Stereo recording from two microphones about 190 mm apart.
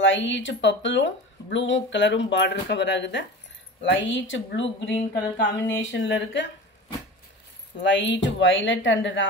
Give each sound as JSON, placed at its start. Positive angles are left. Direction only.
{"t": 0.0, "sound": "speech", "side_deg": 75}
{"t": 7.8, "sound": "speech", "side_deg": 70}